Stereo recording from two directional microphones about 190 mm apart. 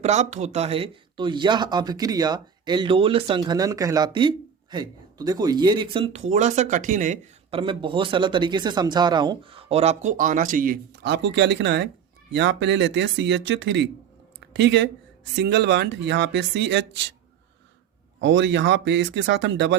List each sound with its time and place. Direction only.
0.0 s speech: 35° right (ahead or behind)
7.5 s speech: 25° right (ahead or behind); by 17.1 s 65° right (ahead or behind)
18.2 s speech: 75° right (ahead or behind)